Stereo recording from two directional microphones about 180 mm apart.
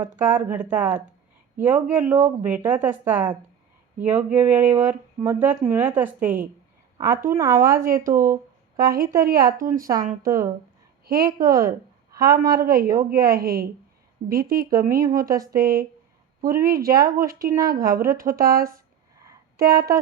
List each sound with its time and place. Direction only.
0.2 s speech: 10° right (ahead or behind)
7.8 s speech: 50° right (ahead or behind)
8.3 s a sound: 20° right (ahead or behind)
8.9 s a woman's voice: 55° right (ahead or behind)
10.2 s speech: 15° right (ahead or behind)
11.0 s a sound: 60° right (ahead or behind)
11.3 s a woman's voice: 20° right (ahead or behind)
12.4 s a woman's voice: 55° right (ahead or behind)
17.6 s a woman's voice: 20° right (ahead or behind)
17.8 s a woman's voice: 55° right (ahead or behind)